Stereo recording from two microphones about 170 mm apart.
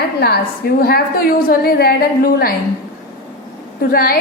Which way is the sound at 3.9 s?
60° left (ahead or behind).